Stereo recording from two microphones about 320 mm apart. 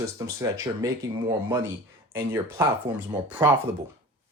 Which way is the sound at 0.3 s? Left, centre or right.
Centre.